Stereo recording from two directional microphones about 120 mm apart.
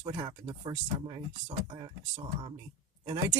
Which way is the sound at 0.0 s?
35° right (ahead or behind).